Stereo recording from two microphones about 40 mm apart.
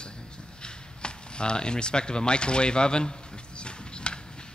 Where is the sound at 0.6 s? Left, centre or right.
Left.